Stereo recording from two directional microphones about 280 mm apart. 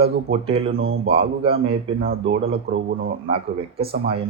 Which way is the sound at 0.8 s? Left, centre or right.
Right.